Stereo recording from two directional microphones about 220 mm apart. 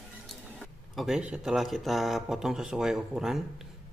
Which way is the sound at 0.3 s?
Centre (ahead or behind).